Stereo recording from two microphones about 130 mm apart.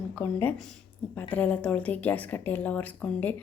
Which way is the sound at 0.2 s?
15° left (ahead or behind).